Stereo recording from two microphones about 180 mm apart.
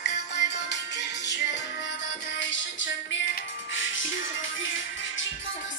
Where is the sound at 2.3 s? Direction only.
90° left.